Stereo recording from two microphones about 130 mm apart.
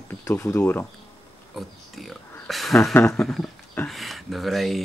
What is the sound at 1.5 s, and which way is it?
Speech, centre (ahead or behind).